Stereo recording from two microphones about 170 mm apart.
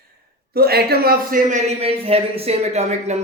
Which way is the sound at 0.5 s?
65° right (ahead or behind).